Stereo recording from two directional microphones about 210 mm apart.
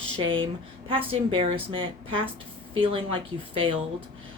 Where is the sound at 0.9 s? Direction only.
25° right (ahead or behind).